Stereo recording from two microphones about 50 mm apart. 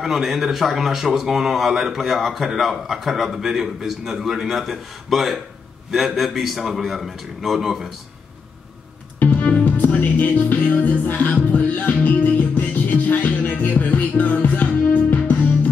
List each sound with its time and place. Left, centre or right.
0.0 s a man's voice: centre
9.2 s music: left